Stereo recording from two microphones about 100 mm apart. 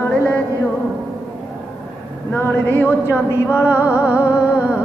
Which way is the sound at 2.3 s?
20° left (ahead or behind).